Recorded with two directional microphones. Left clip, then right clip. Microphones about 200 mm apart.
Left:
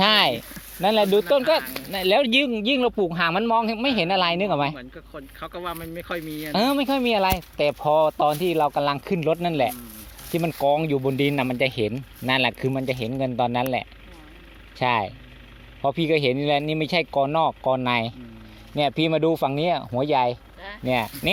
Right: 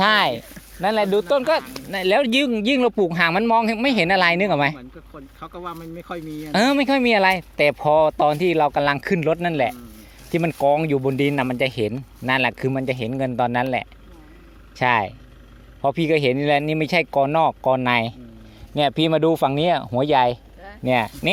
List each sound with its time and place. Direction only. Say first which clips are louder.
0.0 s a sound: right 1 dB; centre (ahead or behind)
1.3 s speech: right 1 dB; 5° left (ahead or behind)
2.6 s speech: right 3 dB; 20° right (ahead or behind)
5.4 s speech: left 1 dB; 45° right (ahead or behind)
6.5 s speech: right 4 dB; 20° right (ahead or behind)